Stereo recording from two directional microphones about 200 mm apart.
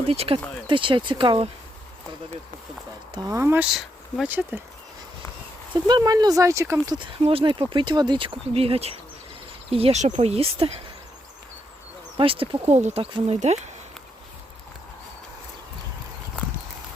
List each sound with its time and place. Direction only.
0.1 s speech: 30° right (ahead or behind)
3.2 s speech: 15° right (ahead or behind)
5.7 s speech: 20° right (ahead or behind)
12.1 s speech: 25° right (ahead or behind)